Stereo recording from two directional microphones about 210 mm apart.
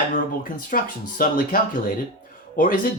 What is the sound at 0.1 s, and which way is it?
Speech, 40° left (ahead or behind).